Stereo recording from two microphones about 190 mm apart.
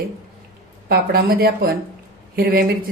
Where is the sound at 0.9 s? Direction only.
50° right (ahead or behind).